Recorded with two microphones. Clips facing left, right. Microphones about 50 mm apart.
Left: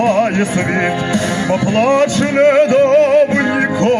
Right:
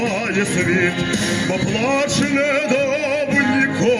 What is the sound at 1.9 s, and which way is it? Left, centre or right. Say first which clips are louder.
Music: left 5 dB; left.